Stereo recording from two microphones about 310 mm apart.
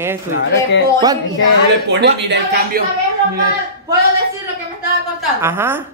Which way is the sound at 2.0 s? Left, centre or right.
Right.